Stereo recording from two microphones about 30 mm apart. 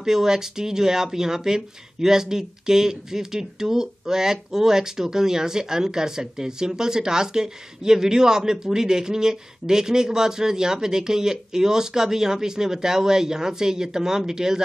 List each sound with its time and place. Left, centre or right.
0.0 s speech: centre